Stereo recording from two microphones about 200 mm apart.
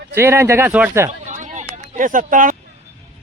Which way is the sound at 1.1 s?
35° right (ahead or behind).